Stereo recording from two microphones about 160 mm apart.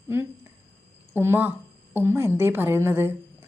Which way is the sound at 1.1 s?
15° right (ahead or behind).